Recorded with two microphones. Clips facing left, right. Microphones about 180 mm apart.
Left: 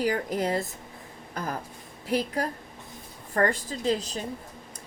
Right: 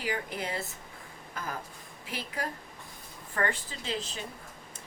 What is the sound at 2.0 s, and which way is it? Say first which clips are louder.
Speech: left 9 dB; 40° left (ahead or behind).